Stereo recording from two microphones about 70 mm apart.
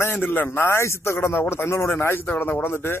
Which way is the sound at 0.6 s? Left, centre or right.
Left.